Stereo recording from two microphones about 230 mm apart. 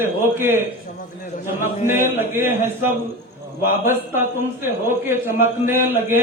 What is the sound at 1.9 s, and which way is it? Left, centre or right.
A man's voice, centre.